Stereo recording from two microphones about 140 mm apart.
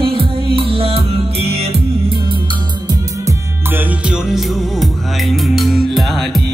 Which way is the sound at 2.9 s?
20° right (ahead or behind).